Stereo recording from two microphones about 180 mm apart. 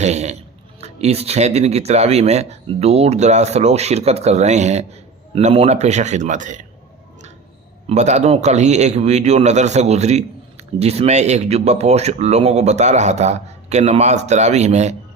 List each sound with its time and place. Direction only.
0.0 s speech: 40° right (ahead or behind)
7.9 s speech: 40° right (ahead or behind)